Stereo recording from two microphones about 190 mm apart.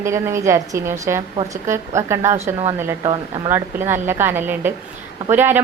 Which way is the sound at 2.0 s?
15° right (ahead or behind).